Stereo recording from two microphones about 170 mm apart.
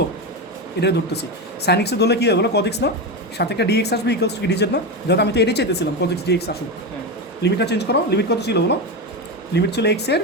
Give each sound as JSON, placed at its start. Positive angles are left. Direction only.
{"t": 0.8, "sound": "speech", "side_deg": 75}